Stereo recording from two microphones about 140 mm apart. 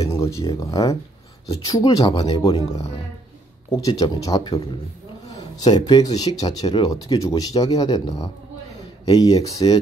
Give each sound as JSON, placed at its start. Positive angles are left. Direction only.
{"t": 0.0, "sound": "speech", "side_deg": 20}